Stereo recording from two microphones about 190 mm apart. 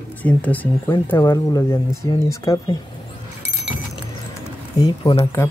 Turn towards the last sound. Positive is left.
turn(degrees=20)  # may be behind; listen again after turning